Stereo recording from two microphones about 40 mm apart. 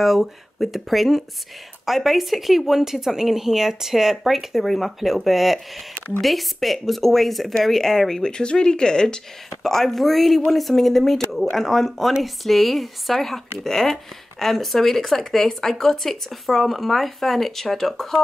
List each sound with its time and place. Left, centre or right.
0.0 s a woman's voice: centre
8.2 s speech: left
9.6 s a woman's voice: centre